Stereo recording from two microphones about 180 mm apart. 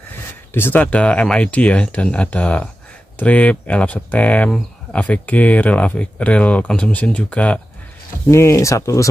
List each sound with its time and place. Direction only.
0.5 s speech: 10° left (ahead or behind)